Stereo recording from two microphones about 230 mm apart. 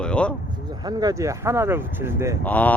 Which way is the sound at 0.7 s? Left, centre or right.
Centre.